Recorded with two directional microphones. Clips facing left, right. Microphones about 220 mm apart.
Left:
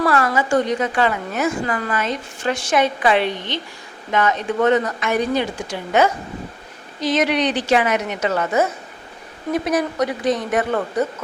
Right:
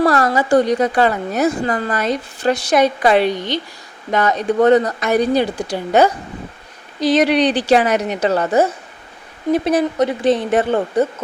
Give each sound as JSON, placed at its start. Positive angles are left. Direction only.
{"t": 0.0, "sound": "a woman's voice", "side_deg": -35}